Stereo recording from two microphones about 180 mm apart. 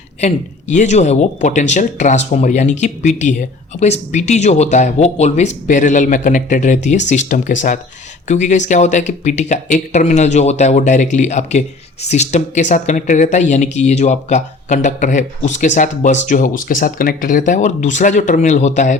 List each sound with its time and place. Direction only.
0.2 s speech: 40° left (ahead or behind)